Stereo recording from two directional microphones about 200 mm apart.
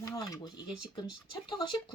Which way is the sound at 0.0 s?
20° left (ahead or behind).